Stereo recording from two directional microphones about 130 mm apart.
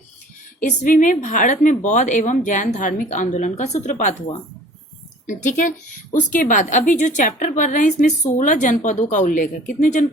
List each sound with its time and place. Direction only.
0.7 s a woman's voice: 70° left (ahead or behind)